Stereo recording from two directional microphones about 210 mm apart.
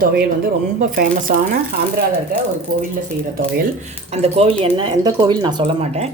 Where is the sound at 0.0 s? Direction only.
45° right (ahead or behind).